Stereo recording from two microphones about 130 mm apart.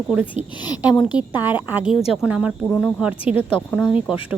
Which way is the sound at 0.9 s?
35° left (ahead or behind).